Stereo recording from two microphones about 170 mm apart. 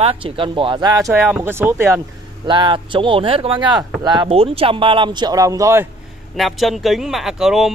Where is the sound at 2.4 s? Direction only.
30° right (ahead or behind).